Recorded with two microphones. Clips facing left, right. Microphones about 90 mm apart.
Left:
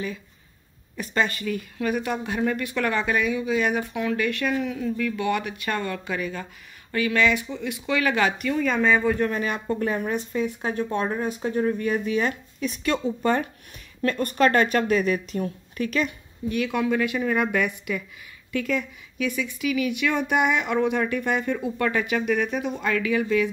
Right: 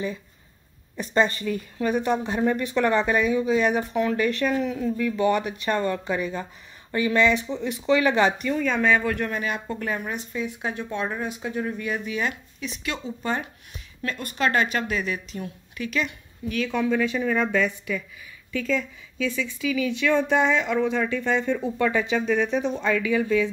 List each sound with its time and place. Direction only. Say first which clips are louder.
0.9 s speech: right 3 dB; 30° right (ahead or behind)
8.5 s speech: left 3 dB; centre (ahead or behind)
9.3 s speech: left 2 dB; 40° left (ahead or behind)
16.5 s speech: even; 10° left (ahead or behind)
21.7 s speech: right 2 dB; 10° right (ahead or behind)
22.1 s speech: right 1 dB; 10° left (ahead or behind)